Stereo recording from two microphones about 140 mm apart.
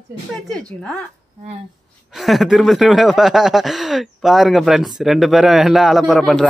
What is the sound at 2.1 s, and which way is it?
Speech, centre (ahead or behind).